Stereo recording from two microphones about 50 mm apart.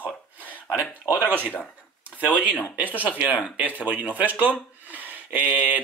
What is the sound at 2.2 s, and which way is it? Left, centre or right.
Speech, right.